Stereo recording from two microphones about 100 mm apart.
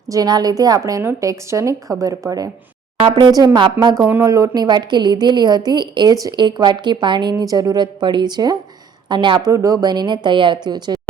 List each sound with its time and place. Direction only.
0.1 s speech: 40° right (ahead or behind)
3.0 s a woman's voice: 50° right (ahead or behind)
4.0 s speech: 20° right (ahead or behind)
4.5 s a woman's voice: 45° right (ahead or behind)
9.4 s a woman's voice: 35° right (ahead or behind)